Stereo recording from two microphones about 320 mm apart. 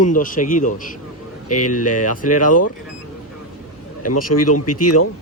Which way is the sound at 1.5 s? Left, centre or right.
Left.